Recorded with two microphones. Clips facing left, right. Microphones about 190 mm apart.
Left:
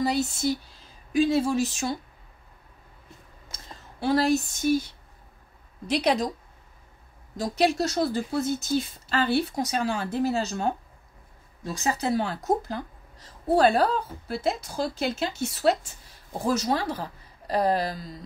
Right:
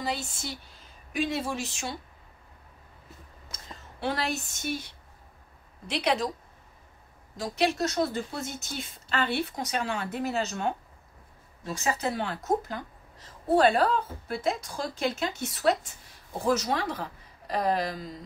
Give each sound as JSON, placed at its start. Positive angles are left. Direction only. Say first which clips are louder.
{"t": 0.0, "sound": "a woman's voice", "louder": "left 9 dB", "side_deg": 40}
{"t": 4.0, "sound": "a woman's voice", "louder": "left 8 dB", "side_deg": 35}
{"t": 5.9, "sound": "a woman's voice", "louder": "left 4 dB", "side_deg": 40}
{"t": 7.3, "sound": "a woman's voice", "louder": "left 3 dB", "side_deg": 35}
{"t": 11.8, "sound": "a woman's voice", "louder": "left 4 dB", "side_deg": 35}